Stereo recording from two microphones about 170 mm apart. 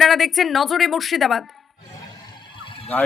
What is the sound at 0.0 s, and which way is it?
Speech, centre (ahead or behind).